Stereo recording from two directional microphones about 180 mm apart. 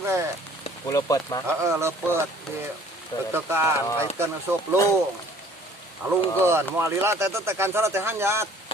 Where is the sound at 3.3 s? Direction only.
15° right (ahead or behind).